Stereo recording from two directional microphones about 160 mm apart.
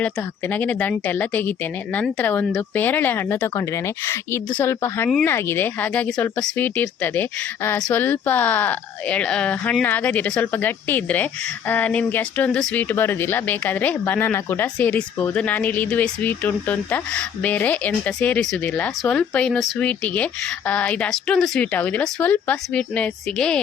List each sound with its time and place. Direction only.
0.0 s speech: 10° left (ahead or behind)